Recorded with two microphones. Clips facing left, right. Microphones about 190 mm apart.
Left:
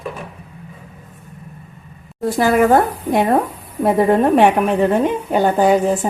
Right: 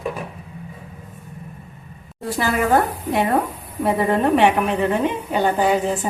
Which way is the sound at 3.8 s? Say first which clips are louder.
Left 5 dB; 45° left (ahead or behind).